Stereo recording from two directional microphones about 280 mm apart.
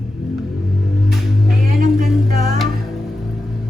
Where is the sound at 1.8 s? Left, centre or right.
Right.